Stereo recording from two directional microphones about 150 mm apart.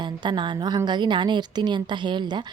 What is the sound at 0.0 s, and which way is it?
A woman's voice, 30° right (ahead or behind).